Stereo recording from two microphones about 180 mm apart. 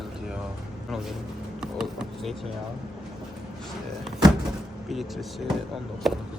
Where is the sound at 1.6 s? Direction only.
5° right (ahead or behind).